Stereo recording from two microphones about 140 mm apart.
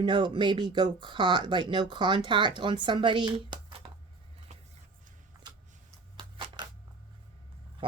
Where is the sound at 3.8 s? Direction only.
45° right (ahead or behind).